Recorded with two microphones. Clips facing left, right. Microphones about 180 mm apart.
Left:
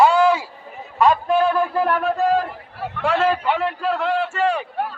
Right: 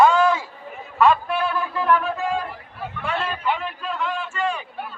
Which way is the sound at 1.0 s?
40° left (ahead or behind).